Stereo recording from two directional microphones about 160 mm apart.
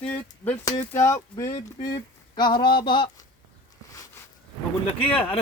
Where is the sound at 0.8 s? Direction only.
15° left (ahead or behind); by 3.3 s 30° left (ahead or behind).